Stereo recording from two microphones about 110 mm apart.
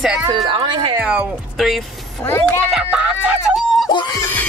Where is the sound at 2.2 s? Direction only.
20° left (ahead or behind).